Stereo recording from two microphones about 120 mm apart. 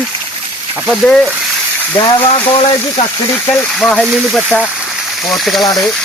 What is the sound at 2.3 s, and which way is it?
Speech, 50° left (ahead or behind).